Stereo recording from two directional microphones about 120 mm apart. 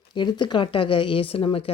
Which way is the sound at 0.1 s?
40° left (ahead or behind).